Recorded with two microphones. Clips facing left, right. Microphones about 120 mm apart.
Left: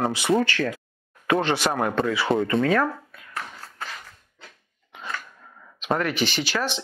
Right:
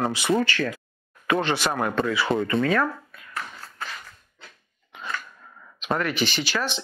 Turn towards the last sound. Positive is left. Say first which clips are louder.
# left 1 dB
turn(degrees=55)  # may be behind; listen again after turning